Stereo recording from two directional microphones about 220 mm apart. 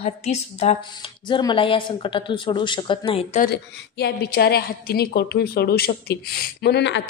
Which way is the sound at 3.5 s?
50° left (ahead or behind).